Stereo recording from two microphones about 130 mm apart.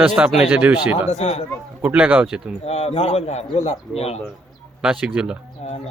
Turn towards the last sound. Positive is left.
turn(degrees=-5)  # may be behind; listen again after turning